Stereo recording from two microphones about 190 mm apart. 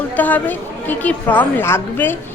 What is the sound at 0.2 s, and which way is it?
A woman's voice, 10° left (ahead or behind).